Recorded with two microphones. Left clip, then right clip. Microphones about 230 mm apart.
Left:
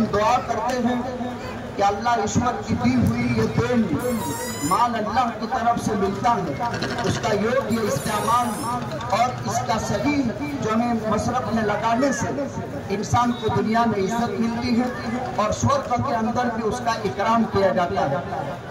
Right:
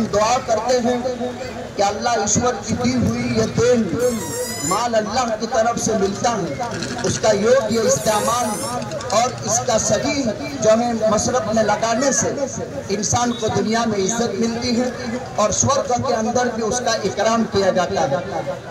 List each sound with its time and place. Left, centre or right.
0.1 s a man's voice: centre
4.7 s speech: centre